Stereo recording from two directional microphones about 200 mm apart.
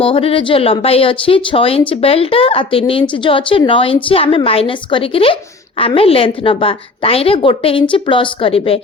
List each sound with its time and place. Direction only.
0.0 s speech: 30° left (ahead or behind)